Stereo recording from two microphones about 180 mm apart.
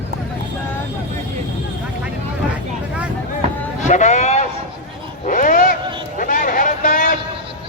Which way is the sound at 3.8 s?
40° left (ahead or behind).